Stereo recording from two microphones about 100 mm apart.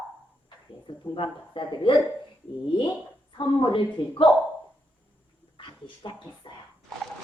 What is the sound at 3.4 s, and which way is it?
Speech, 60° left (ahead or behind).